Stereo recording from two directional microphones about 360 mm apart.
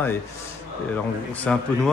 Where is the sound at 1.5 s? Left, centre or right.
Centre.